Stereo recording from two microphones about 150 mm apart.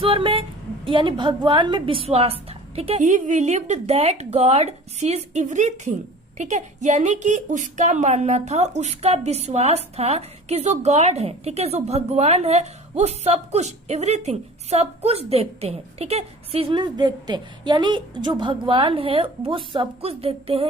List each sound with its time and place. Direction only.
0.0 s a woman's voice: 35° right (ahead or behind)
3.0 s a woman's voice: 55° right (ahead or behind)